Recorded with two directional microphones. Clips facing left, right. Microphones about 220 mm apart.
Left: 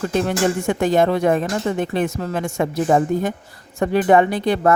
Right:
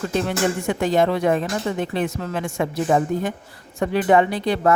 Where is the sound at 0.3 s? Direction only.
45° left (ahead or behind).